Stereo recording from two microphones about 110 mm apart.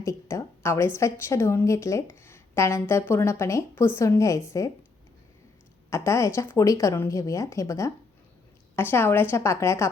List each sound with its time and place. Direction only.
0.0 s a sound: 25° left (ahead or behind)
0.9 s speech: 25° left (ahead or behind)
5.9 s a woman's voice: 25° left (ahead or behind)